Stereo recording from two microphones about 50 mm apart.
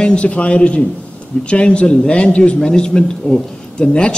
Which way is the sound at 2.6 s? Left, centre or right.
Centre.